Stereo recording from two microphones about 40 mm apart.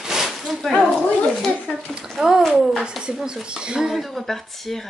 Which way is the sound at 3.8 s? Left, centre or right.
Centre.